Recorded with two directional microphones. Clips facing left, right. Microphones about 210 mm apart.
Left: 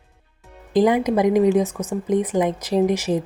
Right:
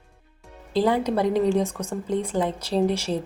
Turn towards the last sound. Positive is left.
turn(degrees=15)  # may be behind; listen again after turning